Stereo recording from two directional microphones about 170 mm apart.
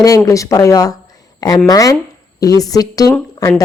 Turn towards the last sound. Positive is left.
turn(degrees=20)  # may be behind; listen again after turning